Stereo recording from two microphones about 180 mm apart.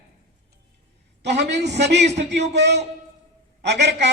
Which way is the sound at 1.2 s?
70° right (ahead or behind).